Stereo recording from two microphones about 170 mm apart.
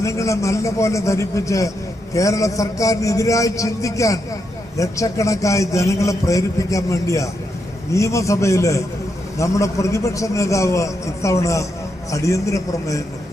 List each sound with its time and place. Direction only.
0.0 s a man's voice: 15° left (ahead or behind)